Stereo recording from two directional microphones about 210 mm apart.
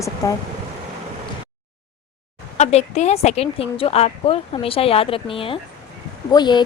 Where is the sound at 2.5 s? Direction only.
30° left (ahead or behind).